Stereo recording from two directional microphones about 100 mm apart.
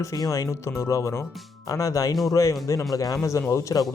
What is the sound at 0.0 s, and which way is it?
Speech, 35° left (ahead or behind).